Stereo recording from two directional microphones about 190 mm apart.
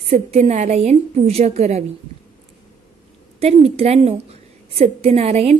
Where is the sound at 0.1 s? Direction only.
35° right (ahead or behind).